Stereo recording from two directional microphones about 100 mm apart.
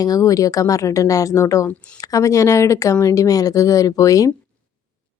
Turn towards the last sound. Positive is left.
turn(degrees=35)  # may be behind; listen again after turning